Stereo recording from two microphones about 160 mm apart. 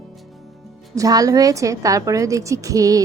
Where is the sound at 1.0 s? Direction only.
20° right (ahead or behind).